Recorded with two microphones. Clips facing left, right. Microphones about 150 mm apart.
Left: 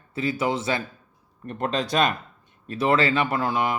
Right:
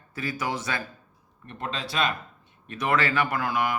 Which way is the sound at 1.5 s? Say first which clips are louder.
Left 8 dB; 45° left (ahead or behind).